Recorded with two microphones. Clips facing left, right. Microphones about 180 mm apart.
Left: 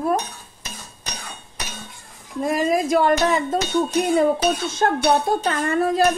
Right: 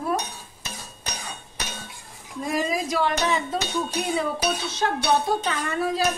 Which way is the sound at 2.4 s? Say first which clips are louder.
Left 6 dB; 55° left (ahead or behind).